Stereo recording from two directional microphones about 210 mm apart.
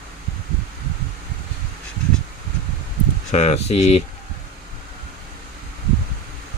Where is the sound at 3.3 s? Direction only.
30° left (ahead or behind).